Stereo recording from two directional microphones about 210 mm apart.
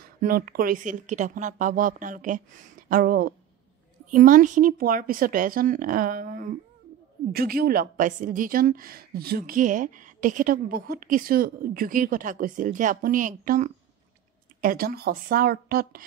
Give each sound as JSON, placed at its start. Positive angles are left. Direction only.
{"t": 0.0, "sound": "a woman's voice", "side_deg": -45}